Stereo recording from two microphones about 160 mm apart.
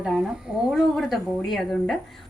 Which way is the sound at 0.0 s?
5° right (ahead or behind).